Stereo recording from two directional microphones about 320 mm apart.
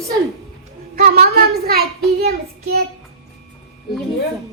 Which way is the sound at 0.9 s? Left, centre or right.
Right.